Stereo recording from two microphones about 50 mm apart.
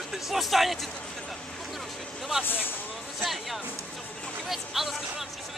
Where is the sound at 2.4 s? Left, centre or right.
Left.